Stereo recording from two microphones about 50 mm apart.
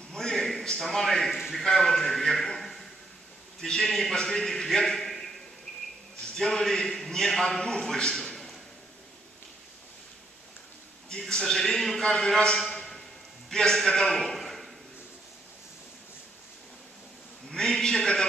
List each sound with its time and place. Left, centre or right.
0.1 s a sound: centre
1.5 s a man's voice: centre
6.3 s a man's voice: centre
11.1 s a man's voice: centre
12.5 s a sound: centre
13.5 s a man's voice: centre
17.5 s a man's voice: centre